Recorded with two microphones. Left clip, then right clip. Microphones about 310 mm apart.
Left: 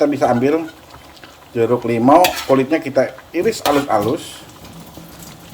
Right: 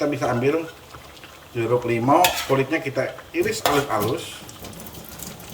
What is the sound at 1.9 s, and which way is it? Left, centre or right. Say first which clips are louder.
Speech: left 6 dB; centre.